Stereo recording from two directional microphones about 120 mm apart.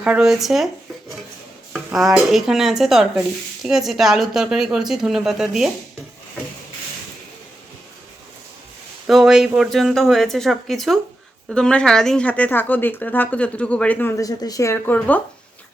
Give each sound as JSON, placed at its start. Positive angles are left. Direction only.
{"t": 0.0, "sound": "speech", "side_deg": -10}
{"t": 1.7, "sound": "speech", "side_deg": 0}
{"t": 9.0, "sound": "speech", "side_deg": 0}
{"t": 14.2, "sound": "speech", "side_deg": 30}
{"t": 14.9, "sound": "speech", "side_deg": 10}